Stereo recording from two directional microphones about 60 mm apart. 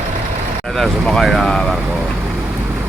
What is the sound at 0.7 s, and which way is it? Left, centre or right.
Speech, centre.